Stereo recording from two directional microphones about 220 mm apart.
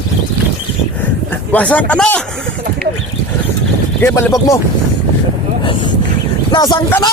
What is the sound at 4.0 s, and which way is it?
Speech, 10° left (ahead or behind).